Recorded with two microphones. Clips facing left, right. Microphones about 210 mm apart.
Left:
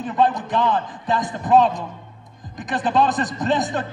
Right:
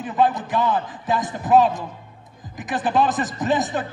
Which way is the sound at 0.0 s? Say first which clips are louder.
Even; 5° right (ahead or behind).